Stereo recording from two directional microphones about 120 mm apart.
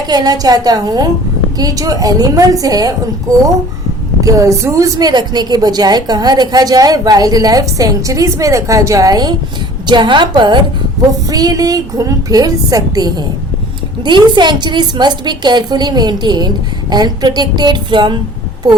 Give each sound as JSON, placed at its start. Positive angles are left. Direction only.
{"t": 0.1, "sound": "a woman's voice", "side_deg": -35}